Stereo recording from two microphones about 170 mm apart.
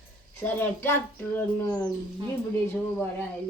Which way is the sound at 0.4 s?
10° left (ahead or behind).